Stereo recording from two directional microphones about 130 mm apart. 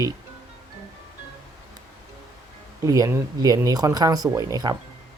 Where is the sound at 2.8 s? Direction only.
25° right (ahead or behind).